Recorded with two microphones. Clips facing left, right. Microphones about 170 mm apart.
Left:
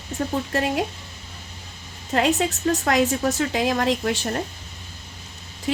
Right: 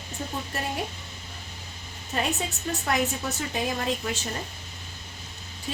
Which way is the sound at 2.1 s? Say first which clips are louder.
Left 8 dB; 85° left.